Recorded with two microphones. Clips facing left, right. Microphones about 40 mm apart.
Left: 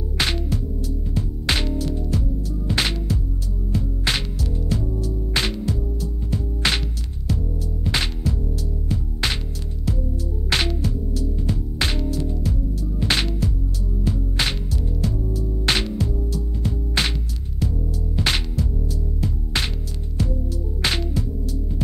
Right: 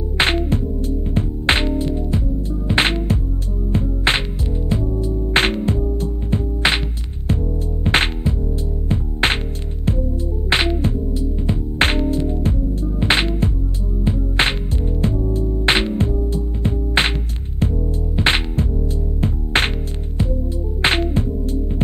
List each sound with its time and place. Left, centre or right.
0.2 s music: right
5.3 s music: right
7.8 s music: right
10.5 s music: right
18.1 s music: right
20.8 s music: right